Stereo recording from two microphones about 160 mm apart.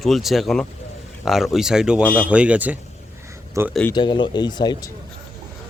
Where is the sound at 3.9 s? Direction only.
30° left (ahead or behind).